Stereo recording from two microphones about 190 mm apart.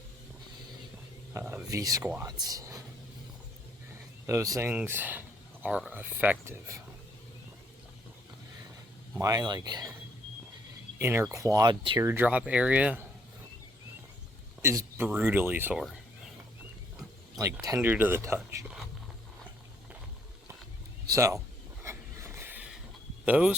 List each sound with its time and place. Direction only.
1.3 s speech: 15° right (ahead or behind)
4.3 s speech: 15° right (ahead or behind)
9.1 s speech: 20° right (ahead or behind)
10.9 s speech: 15° right (ahead or behind)
12.0 s speech: 10° right (ahead or behind)
14.6 s speech: 15° right (ahead or behind)
17.3 s speech: 20° right (ahead or behind)
21.1 s a man's voice: 15° right (ahead or behind)
21.8 s vehicle: 15° right (ahead or behind)
23.2 s speech: 5° right (ahead or behind)